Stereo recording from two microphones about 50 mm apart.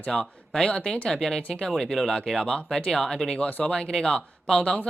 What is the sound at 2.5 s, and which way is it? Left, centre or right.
Speech, centre.